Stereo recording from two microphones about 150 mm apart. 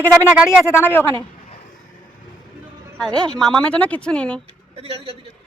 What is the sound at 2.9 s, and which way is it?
A man's voice, 5° left (ahead or behind).